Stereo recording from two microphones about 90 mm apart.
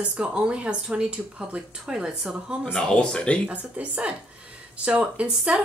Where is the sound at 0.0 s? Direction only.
15° right (ahead or behind).